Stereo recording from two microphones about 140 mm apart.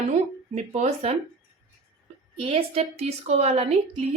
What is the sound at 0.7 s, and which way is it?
Speech, 50° right (ahead or behind).